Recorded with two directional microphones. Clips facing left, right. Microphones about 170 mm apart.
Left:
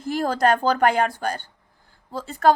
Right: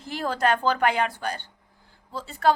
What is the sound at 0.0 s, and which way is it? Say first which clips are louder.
A woman's voice: left 4 dB; 45° left (ahead or behind).